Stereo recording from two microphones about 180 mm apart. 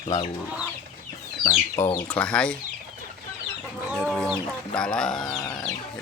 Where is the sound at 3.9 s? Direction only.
5° left (ahead or behind).